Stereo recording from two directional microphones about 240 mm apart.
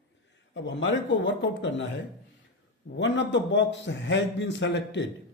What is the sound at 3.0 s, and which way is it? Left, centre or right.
A man's voice, left.